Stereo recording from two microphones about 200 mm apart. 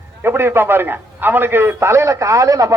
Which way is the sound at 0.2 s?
10° right (ahead or behind).